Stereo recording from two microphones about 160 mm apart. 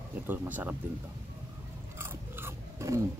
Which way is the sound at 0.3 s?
10° right (ahead or behind).